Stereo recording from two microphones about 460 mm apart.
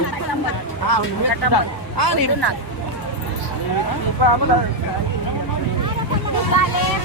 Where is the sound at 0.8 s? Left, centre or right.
Left.